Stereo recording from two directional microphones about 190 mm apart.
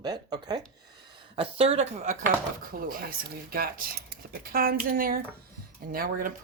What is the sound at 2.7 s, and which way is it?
Speech, 45° right (ahead or behind).